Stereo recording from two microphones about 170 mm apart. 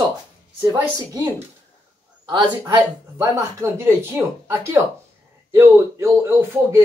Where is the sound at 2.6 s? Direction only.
15° right (ahead or behind).